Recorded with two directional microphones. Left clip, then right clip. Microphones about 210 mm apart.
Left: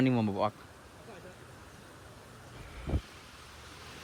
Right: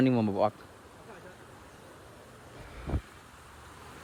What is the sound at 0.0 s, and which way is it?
Speech, 20° right (ahead or behind).